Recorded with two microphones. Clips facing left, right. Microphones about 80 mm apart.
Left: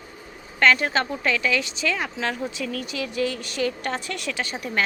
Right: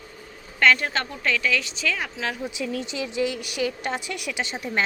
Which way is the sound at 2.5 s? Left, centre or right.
Right.